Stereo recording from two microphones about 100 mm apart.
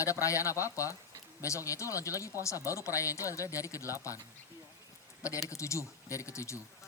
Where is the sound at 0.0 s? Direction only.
30° left (ahead or behind).